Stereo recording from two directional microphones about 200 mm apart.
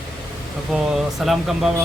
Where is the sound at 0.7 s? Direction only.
Centre (ahead or behind).